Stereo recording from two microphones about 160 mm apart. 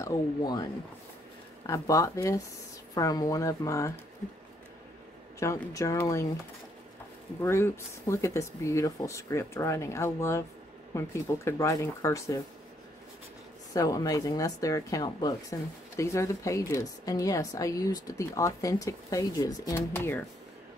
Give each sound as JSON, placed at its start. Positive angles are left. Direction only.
{"t": 0.0, "sound": "a woman's voice", "side_deg": 20}
{"t": 1.7, "sound": "a woman's voice", "side_deg": 20}
{"t": 5.4, "sound": "a woman's voice", "side_deg": 20}
{"t": 7.4, "sound": "a woman's voice", "side_deg": 15}
{"t": 13.7, "sound": "a woman's voice", "side_deg": 20}